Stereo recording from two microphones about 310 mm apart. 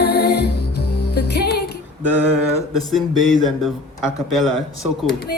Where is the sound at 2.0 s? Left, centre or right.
Centre.